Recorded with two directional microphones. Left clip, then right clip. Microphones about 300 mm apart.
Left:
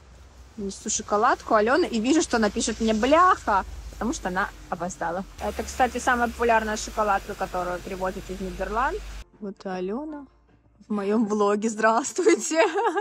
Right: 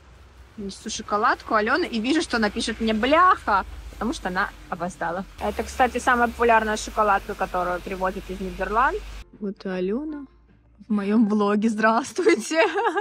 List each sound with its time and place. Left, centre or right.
0.7 s speech: centre